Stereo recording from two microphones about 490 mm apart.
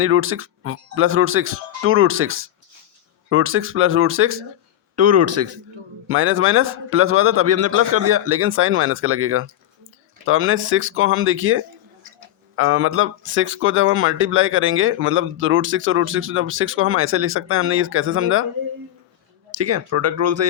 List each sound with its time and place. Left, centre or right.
0.0 s speech: right
19.5 s speech: right